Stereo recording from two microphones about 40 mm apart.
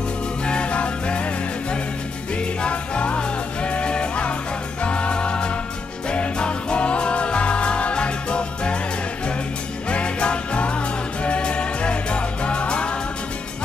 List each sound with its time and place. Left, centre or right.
0.5 s music: left
2.7 s music: left
9.8 s music: left